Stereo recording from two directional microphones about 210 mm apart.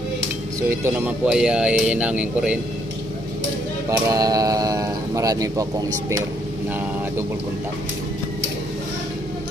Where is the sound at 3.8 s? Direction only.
15° right (ahead or behind).